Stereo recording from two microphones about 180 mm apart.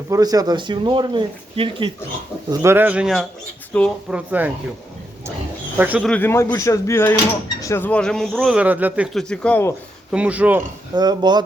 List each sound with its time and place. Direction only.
0.1 s speech: 20° right (ahead or behind)
2.5 s speech: 15° right (ahead or behind); by 3.9 s 5° left (ahead or behind)
4.1 s speech: 10° right (ahead or behind)
5.7 s speech: 10° right (ahead or behind)
6.1 s speech: 10° left (ahead or behind); by 9.0 s 10° right (ahead or behind)
9.1 s speech: 5° left (ahead or behind)
10.1 s speech: 5° right (ahead or behind)
10.9 s speech: 25° right (ahead or behind)